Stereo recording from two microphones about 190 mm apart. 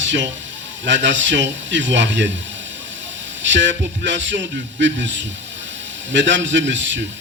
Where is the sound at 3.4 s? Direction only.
75° right (ahead or behind).